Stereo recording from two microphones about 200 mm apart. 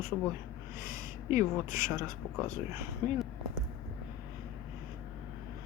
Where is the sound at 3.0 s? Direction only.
15° right (ahead or behind).